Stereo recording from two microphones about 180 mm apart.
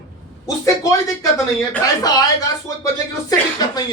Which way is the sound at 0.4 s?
20° left (ahead or behind).